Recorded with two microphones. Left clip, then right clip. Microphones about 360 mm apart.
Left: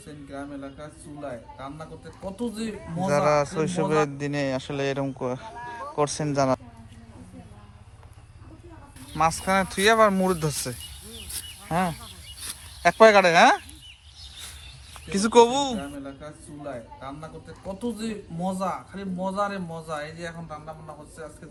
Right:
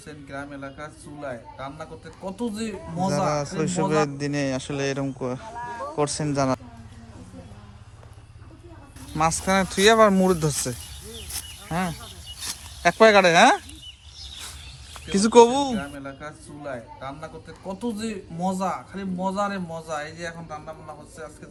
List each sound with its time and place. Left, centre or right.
0.1 s a man's voice: centre
5.5 s a sound: right
6.0 s a man's voice: centre
9.1 s a man's voice: centre
11.3 s a sound: centre
12.9 s a man's voice: centre
15.1 s a man's voice: centre